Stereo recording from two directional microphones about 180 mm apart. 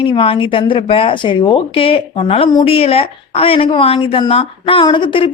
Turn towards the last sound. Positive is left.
turn(degrees=30)  # may be behind; listen again after turning